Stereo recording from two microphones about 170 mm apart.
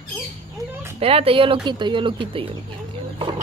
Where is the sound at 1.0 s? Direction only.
35° right (ahead or behind).